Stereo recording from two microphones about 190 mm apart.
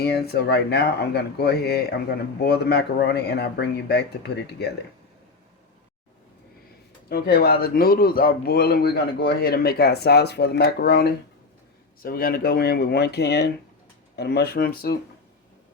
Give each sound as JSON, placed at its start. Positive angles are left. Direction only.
{"t": 0.0, "sound": "speech", "side_deg": 60}
{"t": 7.1, "sound": "speech", "side_deg": 55}